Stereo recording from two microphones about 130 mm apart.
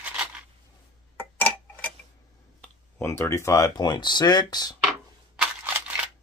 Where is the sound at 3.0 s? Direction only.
20° left (ahead or behind).